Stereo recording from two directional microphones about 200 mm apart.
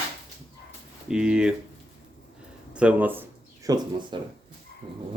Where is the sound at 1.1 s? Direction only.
5° right (ahead or behind).